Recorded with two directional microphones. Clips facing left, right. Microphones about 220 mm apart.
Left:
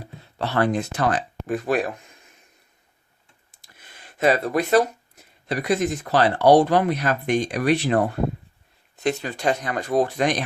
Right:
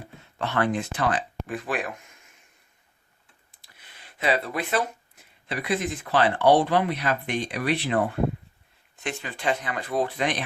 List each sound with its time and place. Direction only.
0.0 s speech: 35° left (ahead or behind)
3.6 s speech: 45° left (ahead or behind)